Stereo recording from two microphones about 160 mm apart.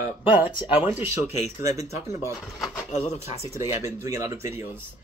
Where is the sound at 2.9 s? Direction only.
45° left (ahead or behind).